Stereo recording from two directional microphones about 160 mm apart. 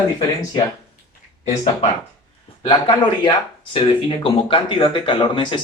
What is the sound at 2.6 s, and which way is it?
Speech, 30° left (ahead or behind).